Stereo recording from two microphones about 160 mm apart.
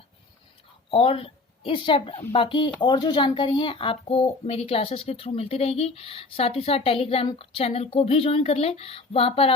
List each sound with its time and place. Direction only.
0.9 s a woman's voice: 35° left (ahead or behind)